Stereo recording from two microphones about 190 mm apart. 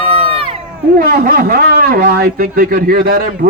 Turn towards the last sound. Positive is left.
turn(degrees=-50)  # may be behind; listen again after turning